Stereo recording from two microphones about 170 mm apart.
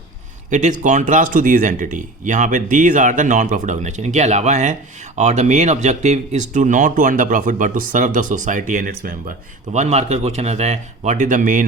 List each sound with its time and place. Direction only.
0.5 s speech: 45° right (ahead or behind)
9.7 s a man's voice: 40° right (ahead or behind)